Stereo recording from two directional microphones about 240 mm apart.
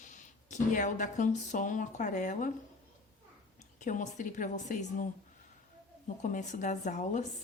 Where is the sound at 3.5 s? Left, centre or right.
Left.